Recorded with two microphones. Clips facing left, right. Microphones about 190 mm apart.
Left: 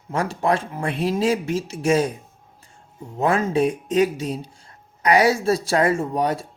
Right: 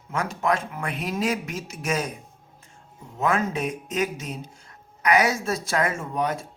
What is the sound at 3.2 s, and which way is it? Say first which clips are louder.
Speech: left 5 dB; 30° left (ahead or behind).